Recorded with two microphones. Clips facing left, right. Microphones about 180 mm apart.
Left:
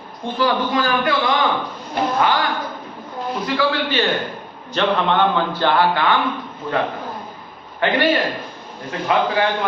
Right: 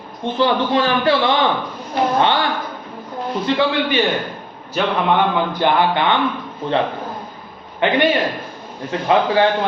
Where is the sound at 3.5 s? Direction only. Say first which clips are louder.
Right 4 dB; 25° right (ahead or behind).